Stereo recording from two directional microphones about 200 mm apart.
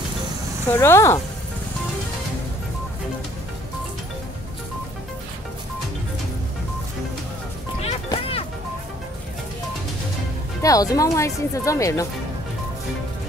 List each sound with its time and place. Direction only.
0.7 s speech: 15° left (ahead or behind)
7.8 s music: 30° left (ahead or behind)
10.6 s speech: 15° left (ahead or behind)